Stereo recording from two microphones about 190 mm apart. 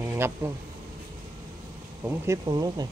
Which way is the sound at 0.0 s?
15° right (ahead or behind).